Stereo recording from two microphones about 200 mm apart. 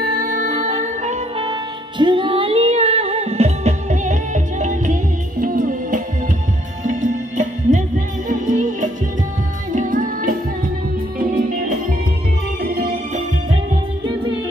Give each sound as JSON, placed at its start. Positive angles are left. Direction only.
{"t": 0.0, "sound": "music", "side_deg": -45}
{"t": 1.5, "sound": "music", "side_deg": -25}